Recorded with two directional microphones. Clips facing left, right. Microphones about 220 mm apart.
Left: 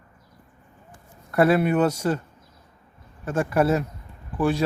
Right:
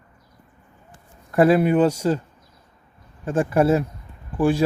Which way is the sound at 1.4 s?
30° right (ahead or behind).